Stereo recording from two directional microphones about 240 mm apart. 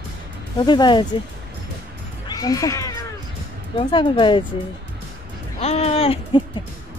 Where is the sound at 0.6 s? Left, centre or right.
Centre.